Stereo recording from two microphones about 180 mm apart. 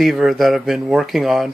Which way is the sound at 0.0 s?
Centre (ahead or behind).